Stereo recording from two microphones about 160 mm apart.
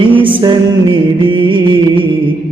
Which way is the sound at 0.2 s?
30° right (ahead or behind).